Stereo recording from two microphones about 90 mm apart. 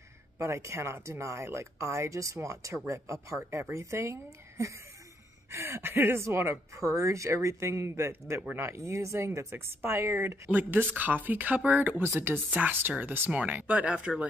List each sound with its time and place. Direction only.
0.4 s speech: 30° right (ahead or behind)
10.5 s speech: 20° right (ahead or behind)